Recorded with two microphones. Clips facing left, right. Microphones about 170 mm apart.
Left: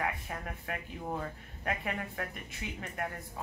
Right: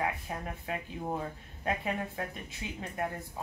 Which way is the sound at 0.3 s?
15° right (ahead or behind).